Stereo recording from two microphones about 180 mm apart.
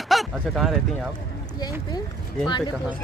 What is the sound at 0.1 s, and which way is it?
Speech, centre (ahead or behind).